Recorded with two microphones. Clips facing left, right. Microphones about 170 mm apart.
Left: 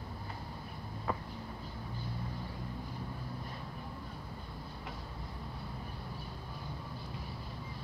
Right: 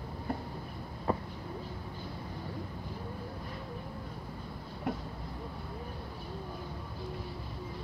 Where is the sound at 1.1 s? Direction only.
30° right (ahead or behind).